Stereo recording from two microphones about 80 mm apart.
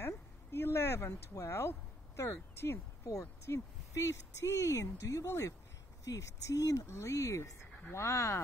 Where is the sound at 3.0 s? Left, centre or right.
Left.